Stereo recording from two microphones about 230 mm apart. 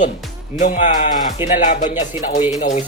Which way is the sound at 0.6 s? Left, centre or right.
Left.